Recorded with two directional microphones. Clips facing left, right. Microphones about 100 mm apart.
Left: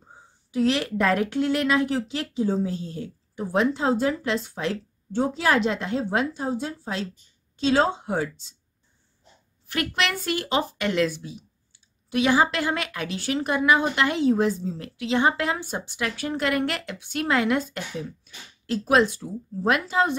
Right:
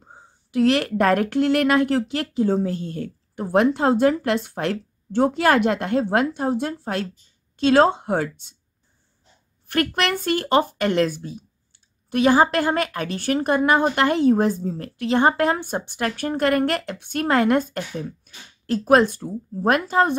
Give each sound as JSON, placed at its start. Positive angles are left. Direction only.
{"t": 0.1, "sound": "a woman's voice", "side_deg": -60}
{"t": 9.7, "sound": "speech", "side_deg": -45}